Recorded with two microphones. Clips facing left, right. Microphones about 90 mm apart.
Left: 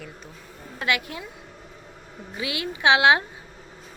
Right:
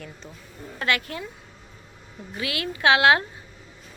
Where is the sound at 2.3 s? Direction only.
20° left (ahead or behind).